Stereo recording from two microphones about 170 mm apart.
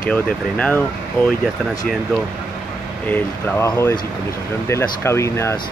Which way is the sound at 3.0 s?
15° left (ahead or behind).